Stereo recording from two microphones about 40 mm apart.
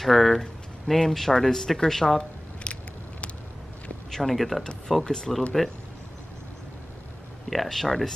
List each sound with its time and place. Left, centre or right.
0.0 s speech: centre
2.6 s biting: left
4.1 s speech: centre
5.0 s speech: centre
5.6 s speech: centre
7.4 s speech: centre